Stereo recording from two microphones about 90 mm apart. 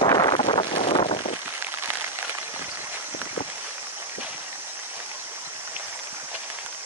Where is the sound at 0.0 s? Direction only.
50° left (ahead or behind).